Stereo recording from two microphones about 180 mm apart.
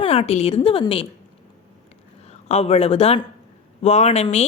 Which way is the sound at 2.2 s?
35° left (ahead or behind).